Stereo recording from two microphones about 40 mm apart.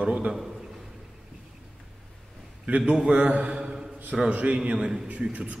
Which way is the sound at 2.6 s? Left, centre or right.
Right.